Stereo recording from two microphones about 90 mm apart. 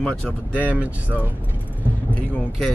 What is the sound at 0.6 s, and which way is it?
Speech, 15° right (ahead or behind).